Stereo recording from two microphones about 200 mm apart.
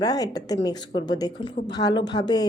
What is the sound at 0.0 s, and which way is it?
A woman's voice, 20° left (ahead or behind).